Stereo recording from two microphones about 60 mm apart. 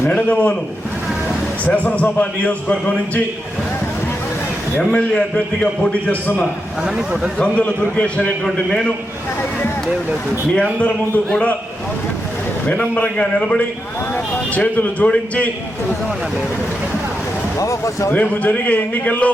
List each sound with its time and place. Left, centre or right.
0.1 s a man's voice: left
1.6 s a man's voice: left
4.8 s a man's voice: centre
5.9 s a man's voice: left
6.8 s a man's voice: centre
7.3 s a man's voice: centre
10.5 s a man's voice: left
12.6 s a man's voice: left
14.5 s a man's voice: left
17.6 s speech: left
18.1 s a man's voice: left